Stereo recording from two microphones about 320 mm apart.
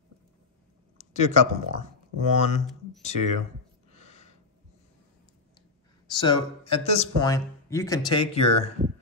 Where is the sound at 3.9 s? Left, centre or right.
Left.